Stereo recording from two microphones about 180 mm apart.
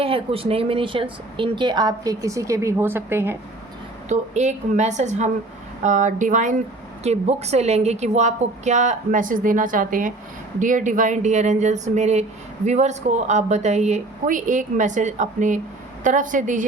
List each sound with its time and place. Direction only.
0.0 s speech: 30° right (ahead or behind); by 3.3 s 10° right (ahead or behind)
4.1 s a woman's voice: 40° right (ahead or behind)